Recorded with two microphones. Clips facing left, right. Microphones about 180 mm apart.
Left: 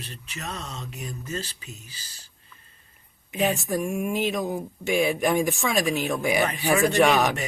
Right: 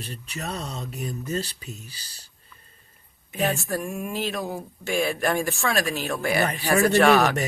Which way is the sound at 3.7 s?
15° left (ahead or behind).